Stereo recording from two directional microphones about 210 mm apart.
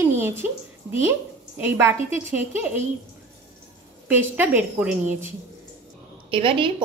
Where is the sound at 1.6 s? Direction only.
10° right (ahead or behind).